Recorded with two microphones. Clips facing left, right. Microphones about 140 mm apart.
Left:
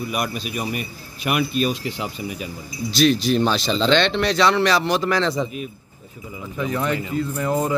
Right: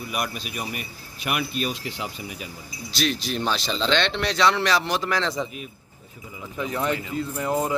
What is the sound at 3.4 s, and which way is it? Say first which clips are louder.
Speech: left 5 dB; 30° left (ahead or behind).